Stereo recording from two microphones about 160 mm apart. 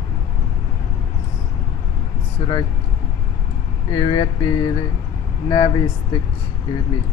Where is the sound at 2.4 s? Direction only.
30° left (ahead or behind).